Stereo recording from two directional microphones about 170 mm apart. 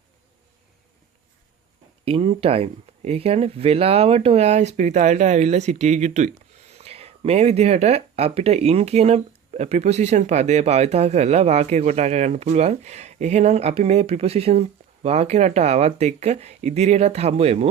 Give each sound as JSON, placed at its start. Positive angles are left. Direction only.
{"t": 2.0, "sound": "speech", "side_deg": -35}